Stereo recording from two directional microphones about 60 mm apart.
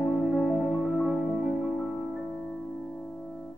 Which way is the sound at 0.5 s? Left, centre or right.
Centre.